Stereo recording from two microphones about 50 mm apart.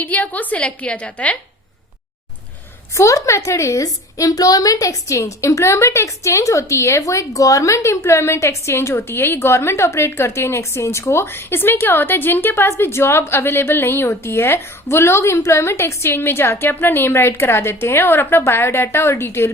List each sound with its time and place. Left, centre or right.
0.0 s a woman's voice: left
2.9 s a woman's voice: left
16.0 s a woman's voice: left